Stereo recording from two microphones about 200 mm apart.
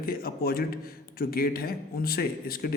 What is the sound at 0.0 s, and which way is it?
Speech, 45° left (ahead or behind).